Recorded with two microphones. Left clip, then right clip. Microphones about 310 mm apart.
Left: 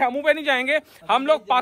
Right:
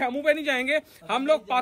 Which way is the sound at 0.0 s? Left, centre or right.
Centre.